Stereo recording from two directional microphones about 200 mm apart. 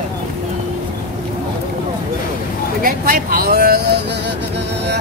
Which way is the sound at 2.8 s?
45° right (ahead or behind).